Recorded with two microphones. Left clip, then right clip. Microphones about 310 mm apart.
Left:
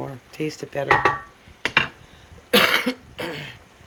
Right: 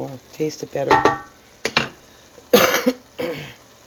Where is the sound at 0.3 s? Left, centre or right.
Centre.